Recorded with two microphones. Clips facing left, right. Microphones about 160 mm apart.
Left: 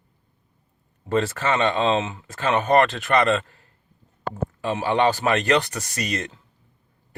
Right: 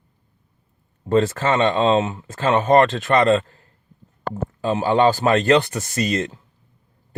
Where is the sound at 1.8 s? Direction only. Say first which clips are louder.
Right 4 dB; 40° right (ahead or behind).